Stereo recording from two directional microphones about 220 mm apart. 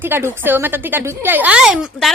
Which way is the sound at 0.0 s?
10° right (ahead or behind).